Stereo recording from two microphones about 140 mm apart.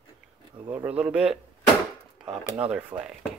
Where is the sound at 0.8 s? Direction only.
10° right (ahead or behind).